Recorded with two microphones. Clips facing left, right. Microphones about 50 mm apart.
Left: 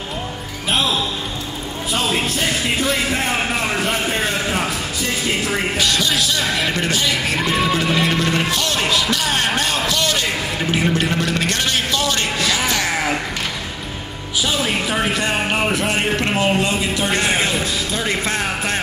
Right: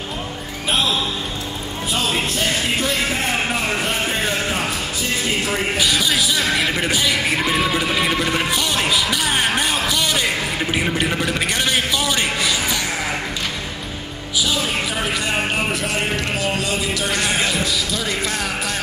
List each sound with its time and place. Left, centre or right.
5.8 s music: centre
14.4 s a sound: left
15.8 s speech: left